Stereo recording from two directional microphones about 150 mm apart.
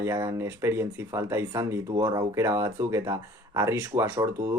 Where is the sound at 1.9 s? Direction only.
25° right (ahead or behind).